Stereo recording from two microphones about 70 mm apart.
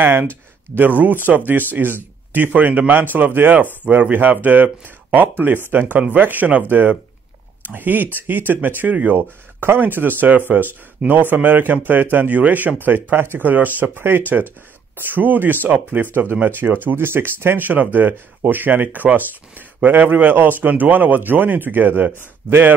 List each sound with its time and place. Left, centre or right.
0.0 s speech: right